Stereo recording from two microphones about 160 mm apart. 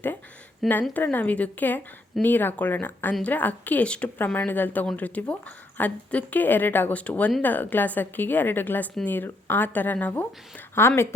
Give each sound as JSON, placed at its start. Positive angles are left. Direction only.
{"t": 0.6, "sound": "a woman's voice", "side_deg": 0}
{"t": 0.9, "sound": "speech", "side_deg": 10}